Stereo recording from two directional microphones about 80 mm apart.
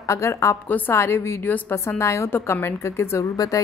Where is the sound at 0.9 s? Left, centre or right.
Left.